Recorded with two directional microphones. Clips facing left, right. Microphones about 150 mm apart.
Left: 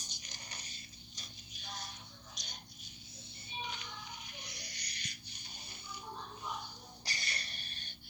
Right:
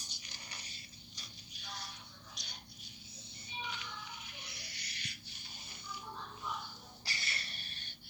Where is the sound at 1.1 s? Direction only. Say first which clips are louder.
Left 2 dB; 20° left (ahead or behind).